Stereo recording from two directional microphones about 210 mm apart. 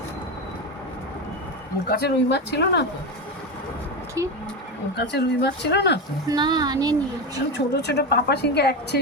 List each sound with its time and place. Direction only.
1.9 s a woman's voice: 50° left (ahead or behind)
4.2 s speech: 15° right (ahead or behind)
4.9 s a woman's voice: 50° left (ahead or behind)
6.2 s speech: 20° right (ahead or behind)
7.5 s a woman's voice: 55° left (ahead or behind)